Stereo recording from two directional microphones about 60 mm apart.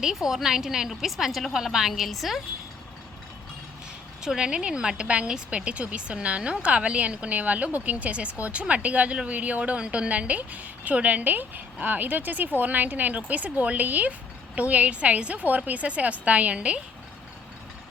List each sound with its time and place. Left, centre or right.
0.0 s a woman's voice: centre
4.2 s speech: centre